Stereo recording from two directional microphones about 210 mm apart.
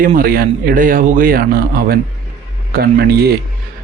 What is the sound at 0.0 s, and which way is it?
A man's voice, 40° right (ahead or behind).